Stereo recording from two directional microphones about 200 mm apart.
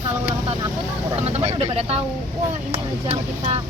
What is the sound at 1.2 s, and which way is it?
Speech, 30° right (ahead or behind).